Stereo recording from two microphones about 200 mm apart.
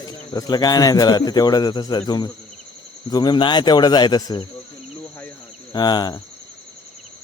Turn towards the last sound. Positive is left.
turn(degrees=20)  # may be behind; listen again after turning